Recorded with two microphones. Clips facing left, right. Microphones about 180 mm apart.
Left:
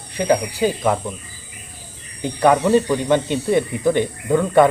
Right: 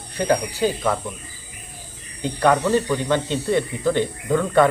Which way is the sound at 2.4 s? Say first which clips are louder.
Left 3 dB; 15° left (ahead or behind).